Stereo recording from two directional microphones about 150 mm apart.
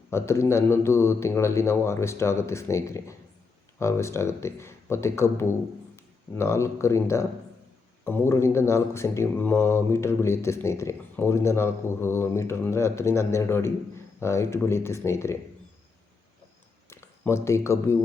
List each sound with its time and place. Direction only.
0.1 s speech: 20° left (ahead or behind)
16.9 s speech: 20° left (ahead or behind)